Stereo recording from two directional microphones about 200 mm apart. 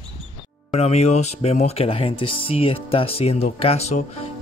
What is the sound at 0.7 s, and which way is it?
Speech, 30° left (ahead or behind).